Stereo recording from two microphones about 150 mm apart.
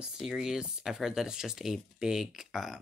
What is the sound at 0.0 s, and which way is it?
Speech, 5° right (ahead or behind).